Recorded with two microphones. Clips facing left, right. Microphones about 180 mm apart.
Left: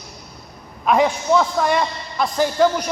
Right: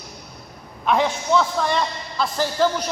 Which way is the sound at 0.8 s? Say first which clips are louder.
Left 3 dB; 5° left (ahead or behind).